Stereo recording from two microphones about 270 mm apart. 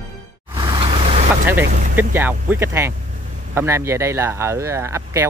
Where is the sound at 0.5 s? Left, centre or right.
Centre.